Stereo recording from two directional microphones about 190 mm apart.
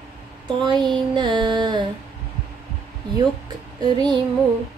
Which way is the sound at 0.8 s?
25° right (ahead or behind).